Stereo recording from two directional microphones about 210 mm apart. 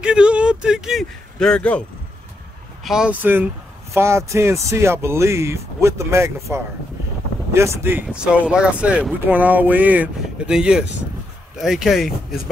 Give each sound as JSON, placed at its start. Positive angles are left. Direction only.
{"t": 0.0, "sound": "speech", "side_deg": -5}